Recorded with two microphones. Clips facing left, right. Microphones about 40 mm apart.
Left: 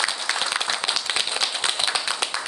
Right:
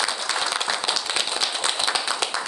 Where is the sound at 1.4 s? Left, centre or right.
Left.